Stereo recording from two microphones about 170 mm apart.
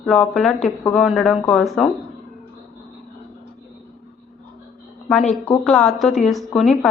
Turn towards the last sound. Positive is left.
turn(degrees=5)  # may be behind; listen again after turning